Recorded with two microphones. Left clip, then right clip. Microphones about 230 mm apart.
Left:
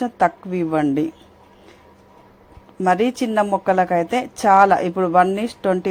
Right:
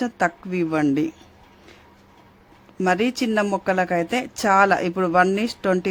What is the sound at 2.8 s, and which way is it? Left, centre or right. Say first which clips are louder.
A woman's voice: left 3 dB; centre.